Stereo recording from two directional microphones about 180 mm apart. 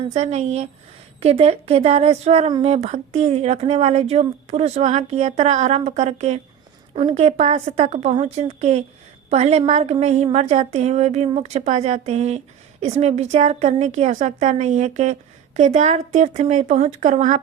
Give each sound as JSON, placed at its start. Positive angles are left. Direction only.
{"t": 0.0, "sound": "a woman's voice", "side_deg": -40}